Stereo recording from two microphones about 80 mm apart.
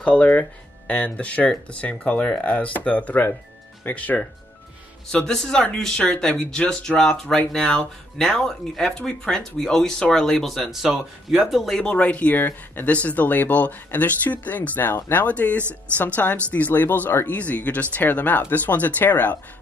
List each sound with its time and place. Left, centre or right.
0.0 s speech: centre
5.1 s speech: centre; by 19.3 s left